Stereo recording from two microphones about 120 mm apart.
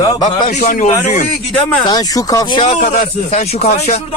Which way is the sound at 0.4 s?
90° left.